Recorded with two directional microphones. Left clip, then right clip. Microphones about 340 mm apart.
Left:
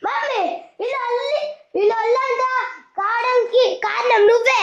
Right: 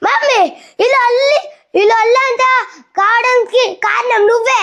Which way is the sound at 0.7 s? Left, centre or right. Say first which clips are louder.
Right 13 dB; right.